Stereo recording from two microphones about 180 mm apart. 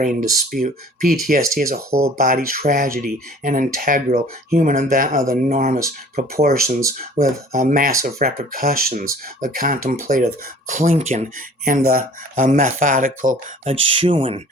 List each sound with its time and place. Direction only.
0.0 s speech: 45° right (ahead or behind)
5.5 s speech: 40° right (ahead or behind)
5.7 s speech: 55° right (ahead or behind)
7.2 s speech: 35° right (ahead or behind)
7.5 s speech: 50° right (ahead or behind)
13.7 s speech: 30° right (ahead or behind)